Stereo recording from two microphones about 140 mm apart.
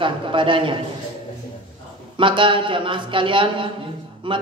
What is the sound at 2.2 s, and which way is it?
Speech, 35° right (ahead or behind).